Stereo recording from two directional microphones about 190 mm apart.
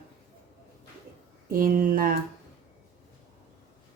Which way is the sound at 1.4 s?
50° right (ahead or behind).